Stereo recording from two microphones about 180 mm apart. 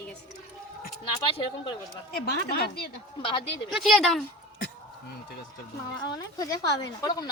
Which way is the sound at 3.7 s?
Centre (ahead or behind).